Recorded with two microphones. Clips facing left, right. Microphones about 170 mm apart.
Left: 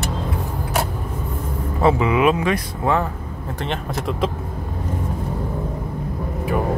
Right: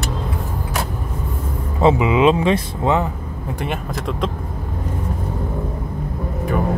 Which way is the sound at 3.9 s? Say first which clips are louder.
Left 3 dB; centre (ahead or behind).